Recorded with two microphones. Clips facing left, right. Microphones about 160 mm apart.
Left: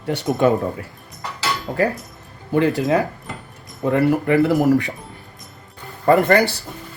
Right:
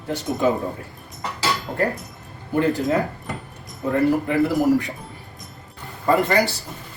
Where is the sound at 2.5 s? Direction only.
75° left (ahead or behind).